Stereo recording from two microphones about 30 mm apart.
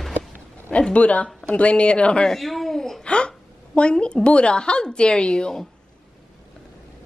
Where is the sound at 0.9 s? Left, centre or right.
Left.